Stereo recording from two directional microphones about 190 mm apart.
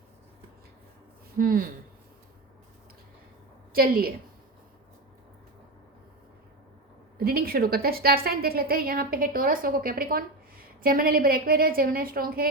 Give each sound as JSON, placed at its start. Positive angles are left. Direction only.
{"t": 1.4, "sound": "a woman's voice", "side_deg": -50}
{"t": 3.7, "sound": "a woman's voice", "side_deg": -50}
{"t": 7.3, "sound": "a woman's voice", "side_deg": -50}